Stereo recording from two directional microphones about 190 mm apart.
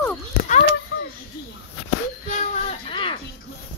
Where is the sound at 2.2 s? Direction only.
40° left (ahead or behind).